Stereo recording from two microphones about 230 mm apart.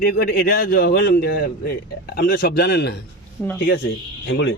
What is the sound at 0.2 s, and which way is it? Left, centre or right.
A man's voice, left.